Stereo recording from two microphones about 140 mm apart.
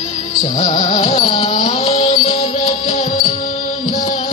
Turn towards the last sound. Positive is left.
turn(degrees=40)  # may be behind; listen again after turning